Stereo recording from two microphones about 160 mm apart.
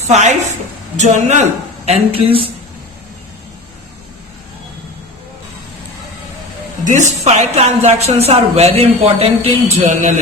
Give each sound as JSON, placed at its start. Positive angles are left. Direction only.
{"t": 0.1, "sound": "a woman's voice", "side_deg": -45}
{"t": 6.8, "sound": "speech", "side_deg": -50}